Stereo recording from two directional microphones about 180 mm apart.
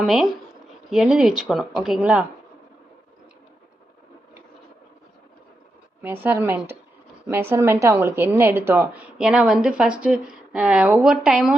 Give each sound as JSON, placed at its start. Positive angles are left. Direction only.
{"t": 0.0, "sound": "speech", "side_deg": 0}
{"t": 6.0, "sound": "a woman's voice", "side_deg": -10}